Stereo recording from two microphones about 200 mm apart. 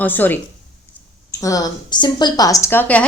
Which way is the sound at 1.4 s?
15° left (ahead or behind).